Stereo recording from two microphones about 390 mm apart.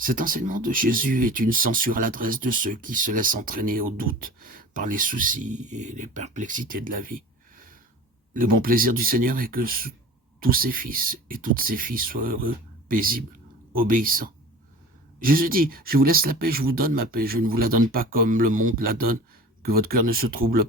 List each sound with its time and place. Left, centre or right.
0.0 s speech: right